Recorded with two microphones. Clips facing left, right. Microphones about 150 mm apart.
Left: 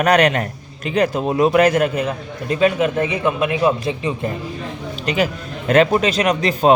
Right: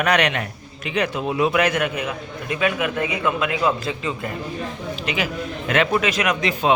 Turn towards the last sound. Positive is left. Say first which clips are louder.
# left 5 dB
turn(degrees=40)  # may be behind; listen again after turning